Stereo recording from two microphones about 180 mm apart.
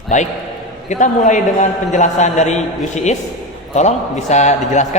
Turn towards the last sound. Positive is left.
turn(degrees=40)  # may be behind; listen again after turning